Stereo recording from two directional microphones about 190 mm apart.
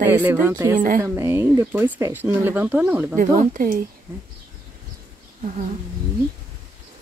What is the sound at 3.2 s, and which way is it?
Speech, 45° right (ahead or behind).